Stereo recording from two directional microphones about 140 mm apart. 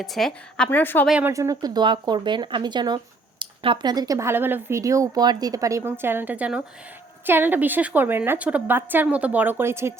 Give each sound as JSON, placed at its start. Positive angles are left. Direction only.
{"t": 0.0, "sound": "a woman's voice", "side_deg": 0}
{"t": 1.2, "sound": "a woman's voice", "side_deg": -25}